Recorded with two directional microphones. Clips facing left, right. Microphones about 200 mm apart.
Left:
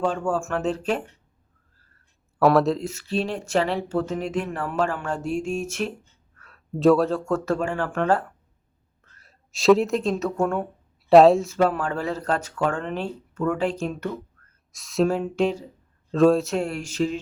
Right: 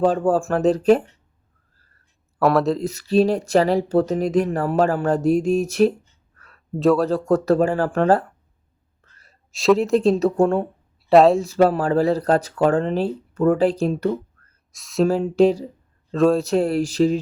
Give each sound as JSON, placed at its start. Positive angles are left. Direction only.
{"t": 0.0, "sound": "speech", "side_deg": -35}
{"t": 2.4, "sound": "speech", "side_deg": 0}
{"t": 2.8, "sound": "speech", "side_deg": -40}
{"t": 6.5, "sound": "speech", "side_deg": 0}
{"t": 7.3, "sound": "speech", "side_deg": -35}
{"t": 9.2, "sound": "a sound", "side_deg": 0}
{"t": 9.9, "sound": "speech", "side_deg": -35}
{"t": 11.1, "sound": "speech", "side_deg": 0}
{"t": 11.4, "sound": "speech", "side_deg": -35}
{"t": 14.7, "sound": "speech", "side_deg": 0}
{"t": 15.1, "sound": "speech", "side_deg": -35}
{"t": 16.1, "sound": "speech", "side_deg": 0}
{"t": 16.5, "sound": "speech", "side_deg": -35}